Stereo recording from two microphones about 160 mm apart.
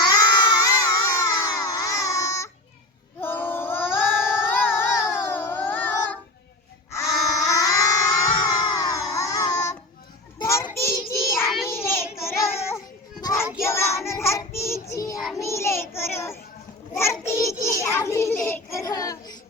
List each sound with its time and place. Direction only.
0.6 s baby cry: 20° left (ahead or behind)
3.2 s child singing: 15° left (ahead or behind)
4.2 s child singing: 5° right (ahead or behind)
4.4 s child singing: 10° left (ahead or behind)
5.1 s a sound: 15° left (ahead or behind)
10.3 s child singing: 20° left (ahead or behind)
11.4 s child singing: centre (ahead or behind)
11.7 s child singing: 15° left (ahead or behind)